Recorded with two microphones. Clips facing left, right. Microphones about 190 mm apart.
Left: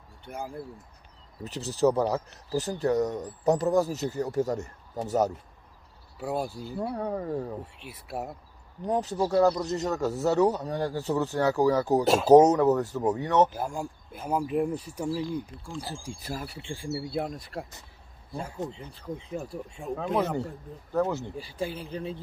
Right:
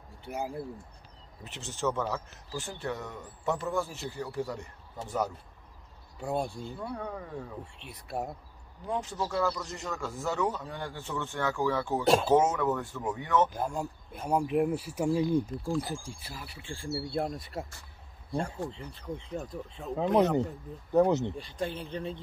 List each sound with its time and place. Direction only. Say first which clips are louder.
1.4 s speech: left 9 dB; 35° left (ahead or behind)
6.1 s speech: left 1 dB; 5° left (ahead or behind)
6.8 s speech: left 8 dB; 35° left (ahead or behind)
7.6 s speech: left 3 dB; 5° left (ahead or behind)
8.8 s speech: left 6 dB; 40° left (ahead or behind)
12.0 s speech: left 1 dB; centre (ahead or behind)
12.3 s speech: left 8 dB; 40° left (ahead or behind)
13.6 s speech: even; 5° left (ahead or behind)
16.2 s speech: left 9 dB; 45° left (ahead or behind)
16.6 s speech: even; 15° left (ahead or behind)
17.1 s speech: left 1 dB; centre (ahead or behind)
18.7 s speech: left 1 dB; centre (ahead or behind)
20.0 s speech: right 4 dB; 20° right (ahead or behind)
21.4 s speech: left 1 dB; 5° left (ahead or behind)